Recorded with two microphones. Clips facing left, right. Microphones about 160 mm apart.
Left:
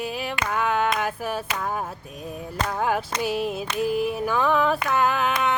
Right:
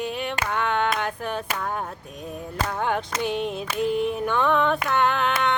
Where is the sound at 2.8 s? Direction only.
5° left (ahead or behind).